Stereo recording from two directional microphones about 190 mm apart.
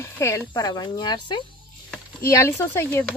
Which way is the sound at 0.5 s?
20° left (ahead or behind).